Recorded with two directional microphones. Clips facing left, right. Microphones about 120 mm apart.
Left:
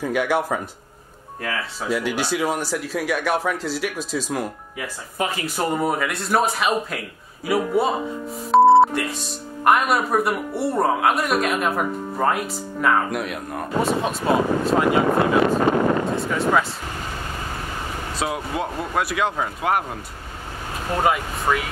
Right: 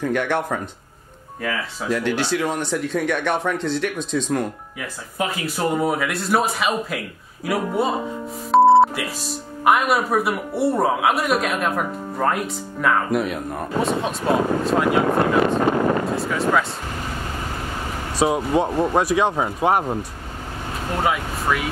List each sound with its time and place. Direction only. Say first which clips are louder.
0.0 s speech: even; 10° left (ahead or behind)
16.2 s speech: even; centre (ahead or behind)
18.2 s speech: right 7 dB; 25° right (ahead or behind)
21.0 s speech: left 2 dB; centre (ahead or behind)